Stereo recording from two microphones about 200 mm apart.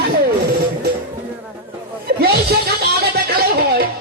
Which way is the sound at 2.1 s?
50° right (ahead or behind).